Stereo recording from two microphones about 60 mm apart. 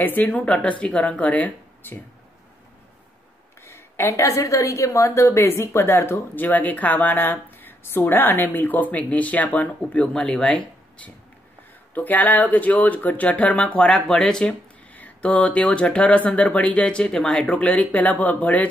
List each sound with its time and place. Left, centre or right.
0.0 s a woman's voice: left
0.4 s speech: left
3.6 s a sound: left
4.1 s a woman's voice: left; by 11.1 s centre
11.9 s speech: left
14.0 s speech: centre
15.0 s speech: left